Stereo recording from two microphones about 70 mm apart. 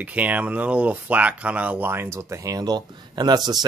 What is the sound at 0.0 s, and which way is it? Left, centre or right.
Speech, right.